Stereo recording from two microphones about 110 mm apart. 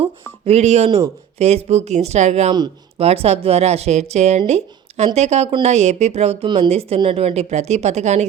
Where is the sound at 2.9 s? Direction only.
65° right (ahead or behind); by 6.3 s 80° right.